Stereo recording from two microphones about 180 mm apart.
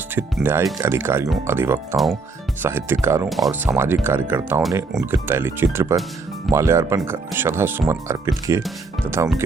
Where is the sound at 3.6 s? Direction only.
15° right (ahead or behind).